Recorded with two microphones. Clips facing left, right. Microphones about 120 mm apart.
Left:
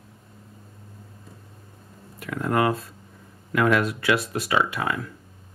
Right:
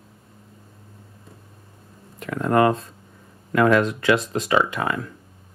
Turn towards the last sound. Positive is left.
turn(degrees=-20)  # may be behind; listen again after turning